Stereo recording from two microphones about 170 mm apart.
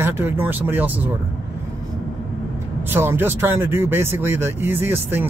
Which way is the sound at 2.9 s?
15° right (ahead or behind).